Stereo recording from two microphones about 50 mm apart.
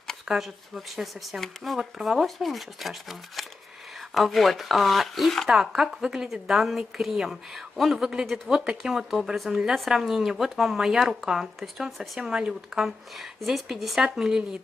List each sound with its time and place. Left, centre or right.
0.2 s speech: centre
5.5 s speech: centre
12.2 s speech: centre